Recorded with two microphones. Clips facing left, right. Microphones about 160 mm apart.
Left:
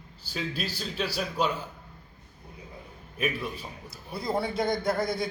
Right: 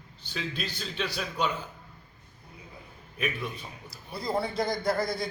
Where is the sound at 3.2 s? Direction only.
5° left (ahead or behind).